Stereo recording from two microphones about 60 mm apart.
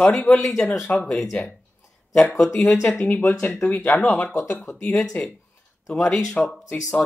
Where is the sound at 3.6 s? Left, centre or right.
Left.